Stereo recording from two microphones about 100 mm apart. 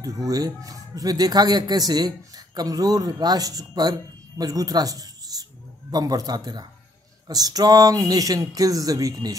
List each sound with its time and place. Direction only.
0.0 s speech: 40° right (ahead or behind)